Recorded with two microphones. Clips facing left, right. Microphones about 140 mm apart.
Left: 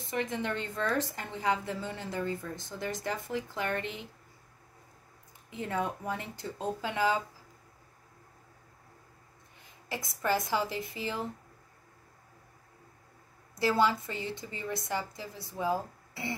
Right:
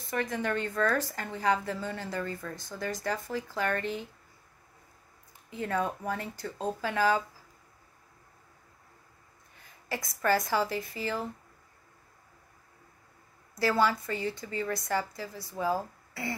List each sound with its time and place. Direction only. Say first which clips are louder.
0.1 s a woman's voice: right 2 dB; 20° left (ahead or behind)
5.5 s a woman's voice: right 2 dB; 20° left (ahead or behind)
9.8 s a woman's voice: right 3 dB; 20° left (ahead or behind)
13.6 s a woman's voice: even; 20° left (ahead or behind)